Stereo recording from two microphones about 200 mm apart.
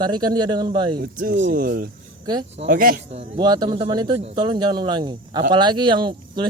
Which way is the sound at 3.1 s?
30° right (ahead or behind).